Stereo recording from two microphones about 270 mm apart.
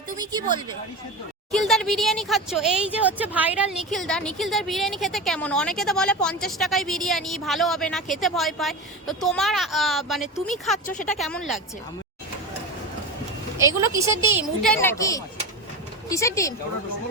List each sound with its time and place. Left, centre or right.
0.2 s speech: centre
1.5 s a woman's voice: centre
10.8 s speech: left
11.2 s a woman's voice: centre
13.6 s a woman's voice: centre
14.6 s a woman's voice: centre